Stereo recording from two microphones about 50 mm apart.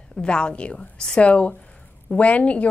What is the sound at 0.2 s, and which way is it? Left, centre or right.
A woman's voice, left.